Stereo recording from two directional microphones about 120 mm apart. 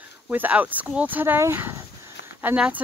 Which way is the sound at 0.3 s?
15° right (ahead or behind).